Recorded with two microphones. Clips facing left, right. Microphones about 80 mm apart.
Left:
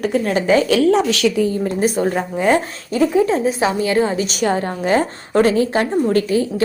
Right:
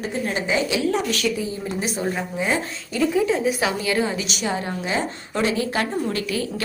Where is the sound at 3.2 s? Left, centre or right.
Left.